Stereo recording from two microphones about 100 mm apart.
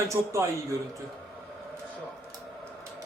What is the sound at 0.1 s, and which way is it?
Speech, 30° right (ahead or behind).